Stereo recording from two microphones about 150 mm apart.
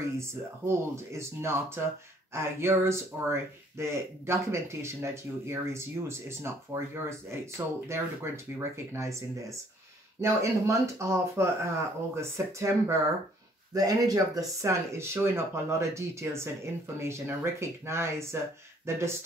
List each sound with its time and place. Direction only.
0.2 s speech: 15° right (ahead or behind)